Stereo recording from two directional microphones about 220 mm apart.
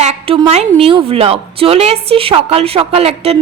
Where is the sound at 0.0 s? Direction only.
30° right (ahead or behind).